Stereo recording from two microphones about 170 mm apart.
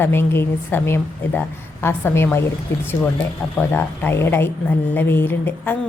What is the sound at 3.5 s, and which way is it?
A woman's voice, 10° left (ahead or behind).